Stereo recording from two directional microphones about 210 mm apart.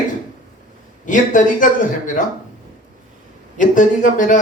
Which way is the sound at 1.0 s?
40° left (ahead or behind).